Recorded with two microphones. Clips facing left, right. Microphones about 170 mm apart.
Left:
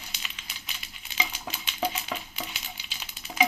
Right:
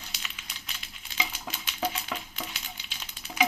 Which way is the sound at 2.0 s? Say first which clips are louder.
Left 1 dB; 5° left (ahead or behind).